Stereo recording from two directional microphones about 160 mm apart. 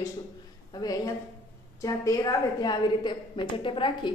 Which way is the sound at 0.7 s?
25° left (ahead or behind).